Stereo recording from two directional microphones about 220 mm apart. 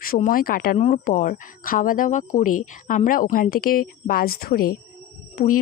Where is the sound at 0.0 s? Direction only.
40° left (ahead or behind).